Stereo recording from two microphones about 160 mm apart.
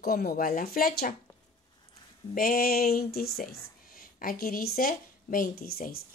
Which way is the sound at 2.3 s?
70° left (ahead or behind).